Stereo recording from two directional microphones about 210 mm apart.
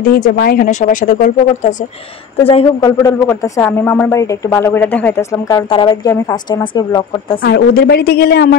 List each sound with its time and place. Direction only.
0.1 s speech: 45° left (ahead or behind); by 2.9 s 30° left (ahead or behind)
3.0 s speech: 15° left (ahead or behind)
7.4 s a woman's voice: 50° left (ahead or behind)